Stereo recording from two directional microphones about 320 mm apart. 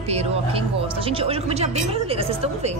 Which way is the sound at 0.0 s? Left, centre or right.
Centre.